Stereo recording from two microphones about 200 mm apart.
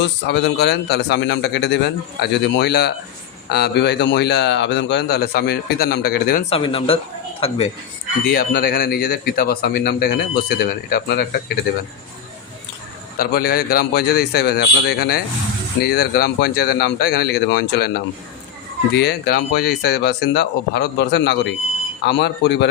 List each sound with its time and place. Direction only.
0.0 s a man's voice: 60° left (ahead or behind)
6.5 s speech: 25° left (ahead or behind)
8.3 s speech: 50° left (ahead or behind)
13.1 s a man's voice: 50° left (ahead or behind)